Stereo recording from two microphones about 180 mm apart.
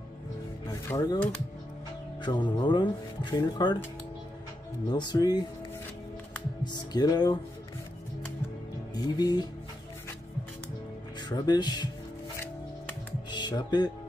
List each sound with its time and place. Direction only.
0.7 s speech: 20° left (ahead or behind)
2.2 s speech: 25° left (ahead or behind)
4.8 s speech: 25° left (ahead or behind)
6.6 s music: 25° left (ahead or behind)
8.9 s speech: 20° left (ahead or behind)
11.2 s speech: 20° left (ahead or behind)
13.3 s speech: 25° left (ahead or behind)